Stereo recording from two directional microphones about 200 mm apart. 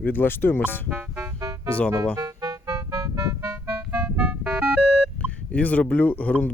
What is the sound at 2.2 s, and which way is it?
Music, 15° right (ahead or behind).